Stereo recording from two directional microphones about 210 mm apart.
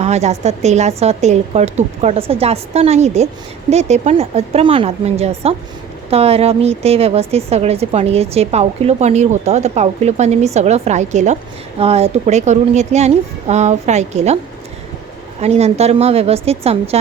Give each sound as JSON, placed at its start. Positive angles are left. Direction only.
{"t": 0.0, "sound": "a woman's voice", "side_deg": -30}
{"t": 15.4, "sound": "a woman's voice", "side_deg": -30}